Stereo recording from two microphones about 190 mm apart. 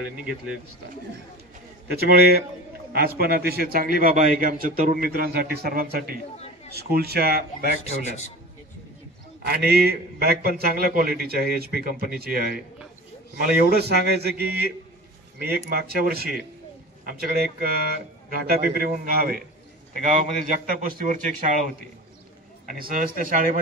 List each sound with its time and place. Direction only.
0.1 s a man's voice: 50° right (ahead or behind)
1.9 s a man's voice: 55° right (ahead or behind)
9.5 s a man's voice: 55° right (ahead or behind)
22.7 s a man's voice: 45° right (ahead or behind)